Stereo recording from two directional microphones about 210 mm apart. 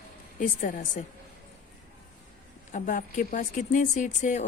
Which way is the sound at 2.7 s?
40° left (ahead or behind).